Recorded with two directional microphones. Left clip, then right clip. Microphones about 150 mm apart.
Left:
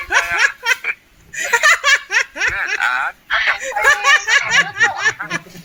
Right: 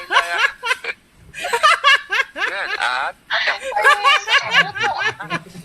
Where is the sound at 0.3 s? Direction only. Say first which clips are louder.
Left 3 dB; centre (ahead or behind).